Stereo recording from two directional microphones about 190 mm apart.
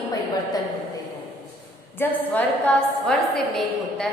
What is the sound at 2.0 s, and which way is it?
A woman's voice, 10° left (ahead or behind).